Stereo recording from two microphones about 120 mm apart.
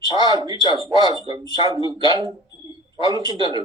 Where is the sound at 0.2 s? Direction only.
35° right (ahead or behind).